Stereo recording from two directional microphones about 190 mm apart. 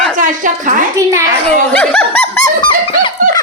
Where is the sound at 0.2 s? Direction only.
45° right (ahead or behind).